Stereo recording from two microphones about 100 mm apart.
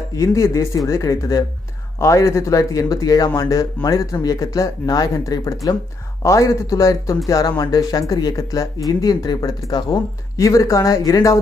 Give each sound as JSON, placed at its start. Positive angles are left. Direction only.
{"t": 0.1, "sound": "speech", "side_deg": 35}